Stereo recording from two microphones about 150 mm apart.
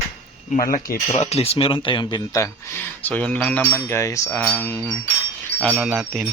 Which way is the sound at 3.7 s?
20° left (ahead or behind).